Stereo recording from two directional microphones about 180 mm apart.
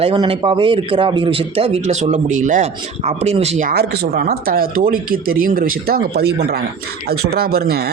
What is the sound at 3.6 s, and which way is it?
Speech, 60° right (ahead or behind).